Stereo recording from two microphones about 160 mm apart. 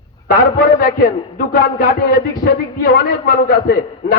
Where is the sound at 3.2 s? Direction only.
60° left (ahead or behind).